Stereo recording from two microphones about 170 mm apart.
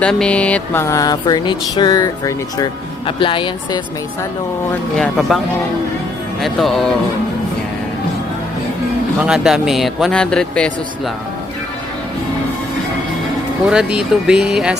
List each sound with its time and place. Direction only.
0.0 s a sound: 5° left (ahead or behind); by 3.8 s 30° left (ahead or behind)
4.9 s a man's voice: centre (ahead or behind)
6.4 s a man's voice: centre (ahead or behind)
9.2 s a man's voice: 5° right (ahead or behind)
13.7 s a man's voice: 5° right (ahead or behind)